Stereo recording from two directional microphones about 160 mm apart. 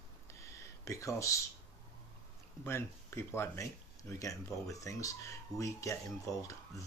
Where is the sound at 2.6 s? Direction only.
15° left (ahead or behind).